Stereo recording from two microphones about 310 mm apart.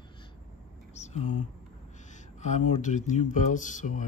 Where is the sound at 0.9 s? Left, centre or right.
Left.